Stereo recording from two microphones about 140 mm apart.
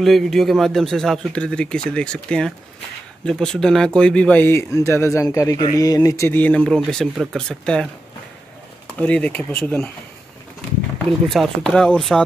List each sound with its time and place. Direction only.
0.0 s a man's voice: centre (ahead or behind)
8.9 s speech: 10° left (ahead or behind)
11.1 s a man's voice: centre (ahead or behind)